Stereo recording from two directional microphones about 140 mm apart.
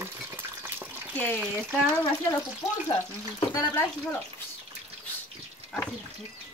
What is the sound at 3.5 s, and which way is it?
Speech, 15° left (ahead or behind).